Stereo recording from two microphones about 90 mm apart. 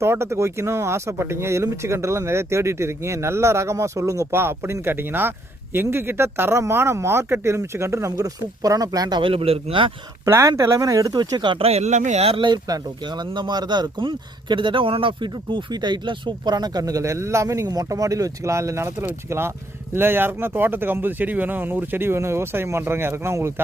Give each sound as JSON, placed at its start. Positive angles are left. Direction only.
{"t": 0.0, "sound": "speech", "side_deg": -30}
{"t": 9.2, "sound": "speech", "side_deg": -90}
{"t": 10.2, "sound": "speech", "side_deg": -30}
{"t": 11.1, "sound": "speech", "side_deg": -50}
{"t": 12.2, "sound": "speech", "side_deg": -75}
{"t": 12.6, "sound": "speech", "side_deg": -50}